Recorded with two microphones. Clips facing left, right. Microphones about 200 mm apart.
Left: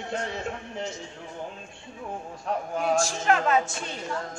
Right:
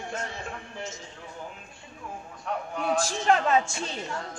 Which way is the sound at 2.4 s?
40° left (ahead or behind).